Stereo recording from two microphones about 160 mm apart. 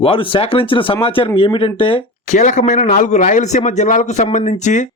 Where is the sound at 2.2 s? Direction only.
50° left (ahead or behind).